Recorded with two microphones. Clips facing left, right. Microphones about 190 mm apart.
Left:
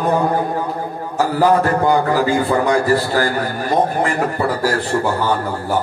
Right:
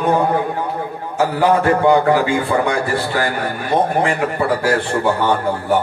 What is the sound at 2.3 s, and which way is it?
A man's voice, 35° left (ahead or behind).